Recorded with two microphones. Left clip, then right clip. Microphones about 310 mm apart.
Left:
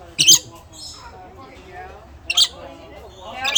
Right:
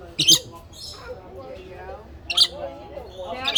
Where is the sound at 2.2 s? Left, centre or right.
Left.